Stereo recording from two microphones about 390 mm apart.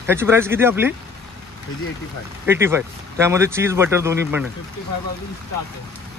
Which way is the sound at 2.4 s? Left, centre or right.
Centre.